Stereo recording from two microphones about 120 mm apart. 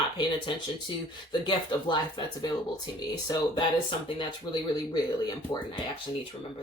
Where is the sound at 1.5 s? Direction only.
40° left (ahead or behind).